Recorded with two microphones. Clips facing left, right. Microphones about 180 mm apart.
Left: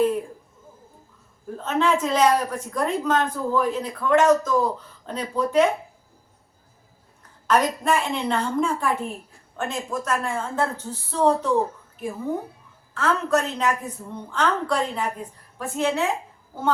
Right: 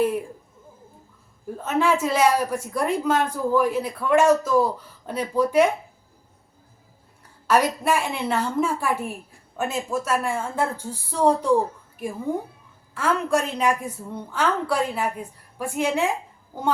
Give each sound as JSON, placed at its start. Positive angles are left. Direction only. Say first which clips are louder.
{"t": 1.6, "sound": "speech", "louder": "even", "side_deg": -10}
{"t": 7.4, "sound": "speech", "louder": "right 1 dB", "side_deg": -10}